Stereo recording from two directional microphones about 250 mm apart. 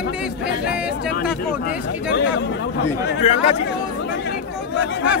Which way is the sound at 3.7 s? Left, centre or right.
Left.